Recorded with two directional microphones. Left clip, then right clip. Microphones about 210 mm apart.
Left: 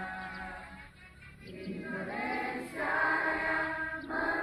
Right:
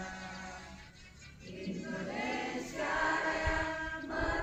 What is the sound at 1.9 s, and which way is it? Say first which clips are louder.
Choir: left 2 dB; 30° right (ahead or behind).